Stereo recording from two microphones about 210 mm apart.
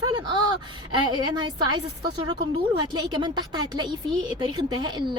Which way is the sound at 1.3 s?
20° right (ahead or behind).